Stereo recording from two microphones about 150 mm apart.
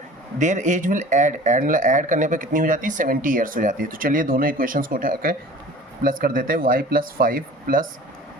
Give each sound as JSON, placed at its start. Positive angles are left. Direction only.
{"t": 0.3, "sound": "speech", "side_deg": -55}